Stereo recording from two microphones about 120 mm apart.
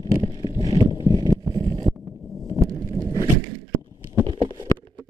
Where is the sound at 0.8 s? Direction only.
40° left (ahead or behind).